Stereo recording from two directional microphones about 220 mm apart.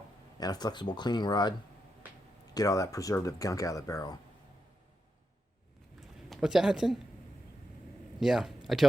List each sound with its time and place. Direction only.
0.3 s speech: 15° left (ahead or behind)
6.3 s speech: centre (ahead or behind)
8.2 s speech: centre (ahead or behind)